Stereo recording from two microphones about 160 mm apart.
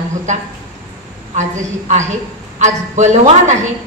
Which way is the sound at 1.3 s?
50° right (ahead or behind).